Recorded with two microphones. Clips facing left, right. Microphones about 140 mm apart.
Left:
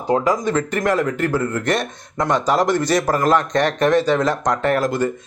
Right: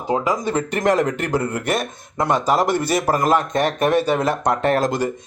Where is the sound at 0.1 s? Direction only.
20° right (ahead or behind).